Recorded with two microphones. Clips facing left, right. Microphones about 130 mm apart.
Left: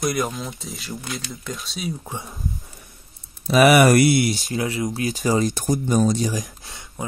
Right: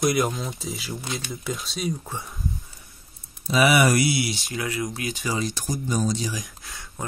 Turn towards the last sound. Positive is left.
turn(degrees=25)  # may be behind; listen again after turning